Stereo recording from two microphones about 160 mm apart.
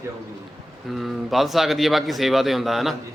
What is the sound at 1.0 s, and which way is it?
Speech, centre (ahead or behind).